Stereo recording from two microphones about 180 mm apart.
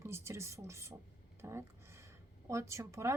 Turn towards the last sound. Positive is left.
turn(degrees=-15)  # may be behind; listen again after turning